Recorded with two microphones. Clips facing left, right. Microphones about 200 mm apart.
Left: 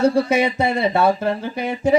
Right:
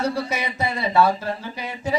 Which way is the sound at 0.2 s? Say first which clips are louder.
Left 8 dB; 55° left (ahead or behind).